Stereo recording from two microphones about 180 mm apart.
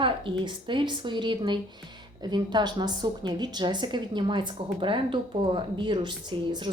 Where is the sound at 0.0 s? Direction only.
25° right (ahead or behind).